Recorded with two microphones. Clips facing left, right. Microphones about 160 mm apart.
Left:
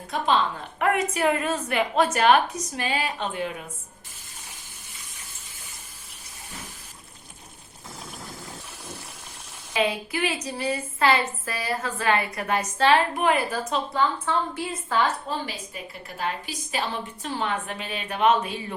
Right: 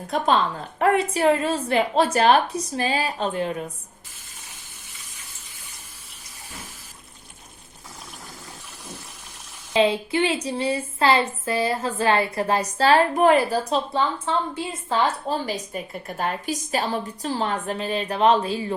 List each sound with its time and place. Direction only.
0.8 s a woman's voice: 35° right (ahead or behind)
9.7 s a woman's voice: 30° right (ahead or behind)